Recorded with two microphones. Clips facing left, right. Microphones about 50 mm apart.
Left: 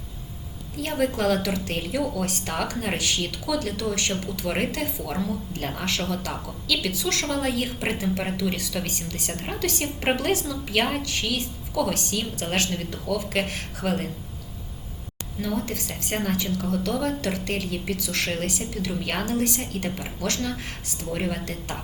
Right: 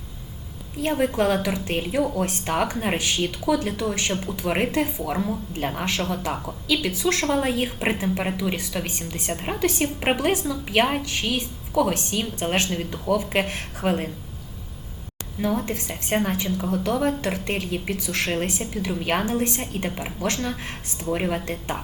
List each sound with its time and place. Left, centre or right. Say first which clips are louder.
0.8 s a woman's voice: right 3 dB; centre
15.4 s speech: right 3 dB; right